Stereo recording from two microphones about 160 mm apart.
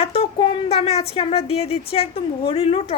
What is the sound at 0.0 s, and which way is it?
A woman's voice, 35° left (ahead or behind).